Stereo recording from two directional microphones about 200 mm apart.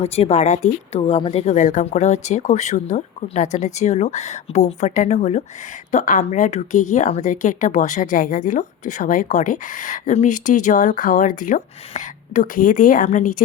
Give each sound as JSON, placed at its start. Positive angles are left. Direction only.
{"t": 0.0, "sound": "a woman's voice", "side_deg": 30}